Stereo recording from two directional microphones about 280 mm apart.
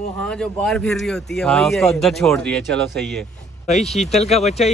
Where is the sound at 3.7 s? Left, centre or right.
Left.